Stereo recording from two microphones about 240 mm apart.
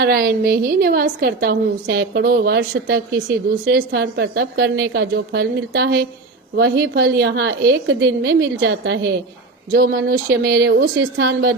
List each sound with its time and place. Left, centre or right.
0.0 s a woman's voice: right